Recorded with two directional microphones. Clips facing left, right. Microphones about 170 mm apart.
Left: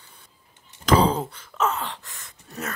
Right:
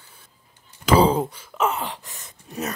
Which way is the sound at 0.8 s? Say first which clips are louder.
Right 2 dB; 10° right (ahead or behind).